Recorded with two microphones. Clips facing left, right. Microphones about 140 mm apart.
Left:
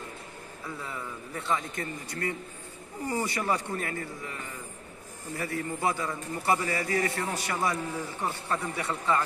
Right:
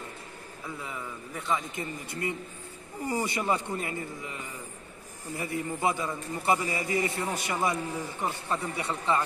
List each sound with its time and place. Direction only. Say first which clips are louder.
0.7 s a man's voice: left 1 dB; 10° right (ahead or behind)
1.8 s a man's voice: even; 20° right (ahead or behind)